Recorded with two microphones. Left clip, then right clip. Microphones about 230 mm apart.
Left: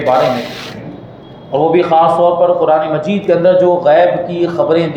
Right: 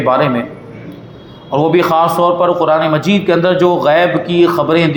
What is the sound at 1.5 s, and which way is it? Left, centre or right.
A man's voice, right.